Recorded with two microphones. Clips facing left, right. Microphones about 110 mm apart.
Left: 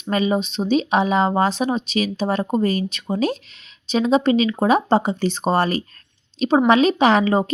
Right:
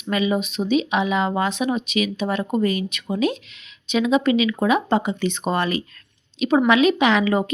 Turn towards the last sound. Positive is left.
turn(degrees=35)  # may be behind; listen again after turning